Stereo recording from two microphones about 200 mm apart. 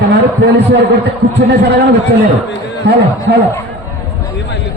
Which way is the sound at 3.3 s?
55° right (ahead or behind).